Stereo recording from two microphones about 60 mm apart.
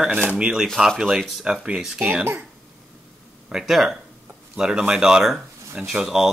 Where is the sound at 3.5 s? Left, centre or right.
Centre.